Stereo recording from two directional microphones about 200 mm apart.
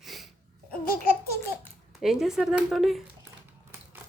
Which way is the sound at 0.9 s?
45° left (ahead or behind).